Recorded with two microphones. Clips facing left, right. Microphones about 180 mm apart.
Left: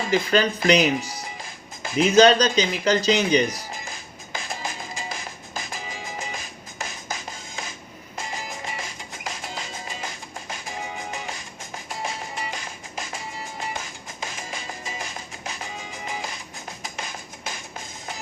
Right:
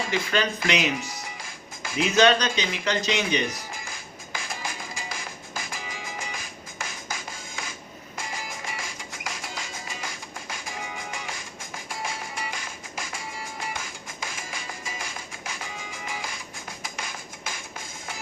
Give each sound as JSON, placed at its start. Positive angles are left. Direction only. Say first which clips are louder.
{"t": 0.1, "sound": "speech", "louder": "left 8 dB", "side_deg": 35}
{"t": 1.4, "sound": "music", "louder": "left 3 dB", "side_deg": 20}
{"t": 2.0, "sound": "speech", "louder": "left 5 dB", "side_deg": 35}
{"t": 3.8, "sound": "music", "louder": "left 1 dB", "side_deg": 20}
{"t": 8.1, "sound": "music", "louder": "left 3 dB", "side_deg": 20}
{"t": 16.0, "sound": "music", "louder": "left 3 dB", "side_deg": 25}